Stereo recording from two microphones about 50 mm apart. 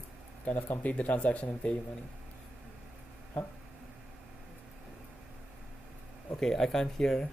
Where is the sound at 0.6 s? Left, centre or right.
Left.